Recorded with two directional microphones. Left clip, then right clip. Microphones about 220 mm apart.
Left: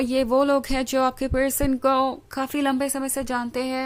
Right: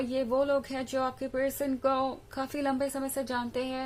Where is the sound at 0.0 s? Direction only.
35° left (ahead or behind).